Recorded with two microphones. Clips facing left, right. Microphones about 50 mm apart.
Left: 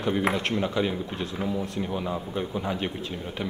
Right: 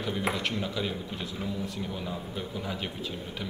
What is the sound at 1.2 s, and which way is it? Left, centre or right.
Speech, left.